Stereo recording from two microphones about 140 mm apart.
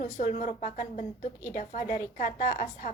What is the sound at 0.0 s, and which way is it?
A woman's voice, 60° left (ahead or behind).